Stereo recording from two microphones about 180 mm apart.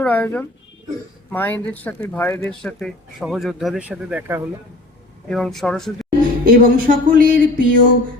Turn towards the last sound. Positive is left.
turn(degrees=-50)  # may be behind; listen again after turning